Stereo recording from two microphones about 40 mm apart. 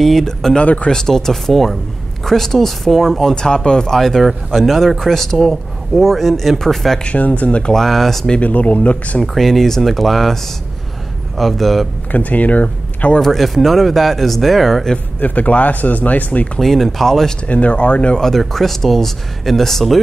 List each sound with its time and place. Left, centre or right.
0.0 s speech: centre
3.3 s speech: centre
3.9 s a man's voice: centre
7.1 s speech: left
7.7 s a man's voice: centre
8.4 s speech: left
9.3 s a man's voice: centre
12.1 s speech: left
13.2 s a man's voice: centre
15.1 s speech: left
16.5 s speech: centre
17.5 s speech: left
18.2 s a man's voice: centre